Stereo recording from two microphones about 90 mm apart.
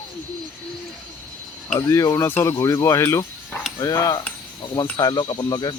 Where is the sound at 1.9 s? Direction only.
40° left (ahead or behind).